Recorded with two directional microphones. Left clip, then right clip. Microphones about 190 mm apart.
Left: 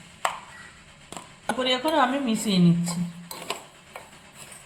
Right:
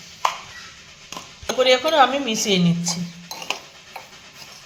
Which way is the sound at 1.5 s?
25° right (ahead or behind).